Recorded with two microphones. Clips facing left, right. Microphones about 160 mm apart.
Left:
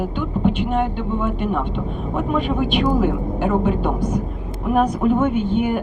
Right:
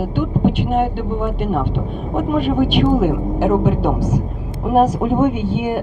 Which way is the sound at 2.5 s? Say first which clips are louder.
Right 5 dB; 45° right (ahead or behind).